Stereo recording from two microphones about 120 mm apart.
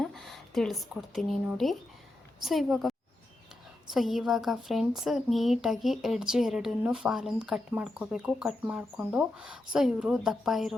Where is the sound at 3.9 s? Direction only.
Centre (ahead or behind).